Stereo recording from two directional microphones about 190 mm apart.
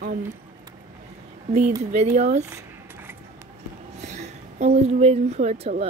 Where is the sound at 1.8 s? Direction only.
35° right (ahead or behind).